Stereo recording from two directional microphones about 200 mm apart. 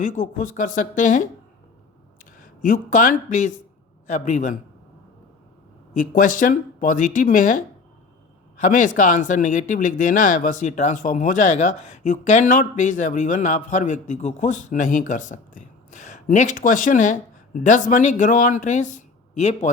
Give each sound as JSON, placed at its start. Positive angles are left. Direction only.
{"t": 0.0, "sound": "speech", "side_deg": 40}
{"t": 2.6, "sound": "speech", "side_deg": 40}
{"t": 5.9, "sound": "speech", "side_deg": 40}